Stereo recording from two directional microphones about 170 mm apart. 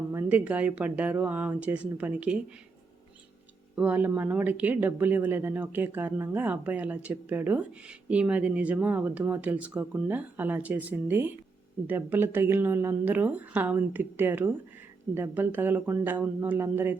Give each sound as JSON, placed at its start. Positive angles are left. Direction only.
{"t": 0.1, "sound": "speech", "side_deg": -15}
{"t": 3.8, "sound": "speech", "side_deg": -10}